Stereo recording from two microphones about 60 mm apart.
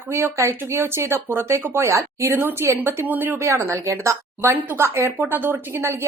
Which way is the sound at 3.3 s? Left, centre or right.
Right.